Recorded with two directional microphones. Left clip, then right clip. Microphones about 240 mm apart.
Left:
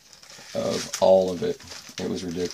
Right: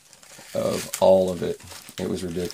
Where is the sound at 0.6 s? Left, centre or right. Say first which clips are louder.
Right 1 dB; right.